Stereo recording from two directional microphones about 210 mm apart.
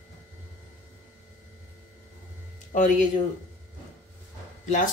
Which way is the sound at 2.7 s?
35° left (ahead or behind).